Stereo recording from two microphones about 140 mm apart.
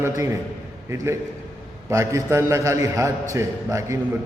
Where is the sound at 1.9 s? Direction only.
20° right (ahead or behind).